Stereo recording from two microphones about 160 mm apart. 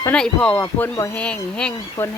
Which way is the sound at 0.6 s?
20° left (ahead or behind).